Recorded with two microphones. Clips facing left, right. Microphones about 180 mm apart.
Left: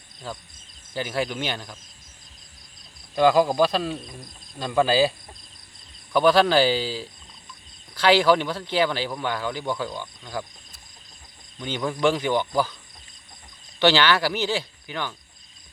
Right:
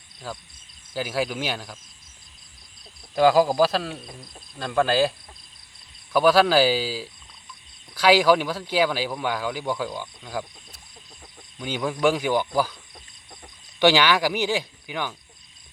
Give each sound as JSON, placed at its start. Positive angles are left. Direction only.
{"t": 0.2, "sound": "a man's voice", "side_deg": 0}
{"t": 3.2, "sound": "a man's voice", "side_deg": -5}
{"t": 6.1, "sound": "speech", "side_deg": -5}
{"t": 11.6, "sound": "speech", "side_deg": -10}
{"t": 13.7, "sound": "speech", "side_deg": -15}